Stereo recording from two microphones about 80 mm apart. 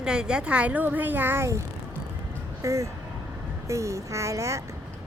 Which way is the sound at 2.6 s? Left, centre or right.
Right.